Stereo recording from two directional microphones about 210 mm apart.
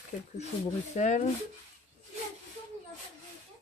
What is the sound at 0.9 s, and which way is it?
Speech, 35° left (ahead or behind).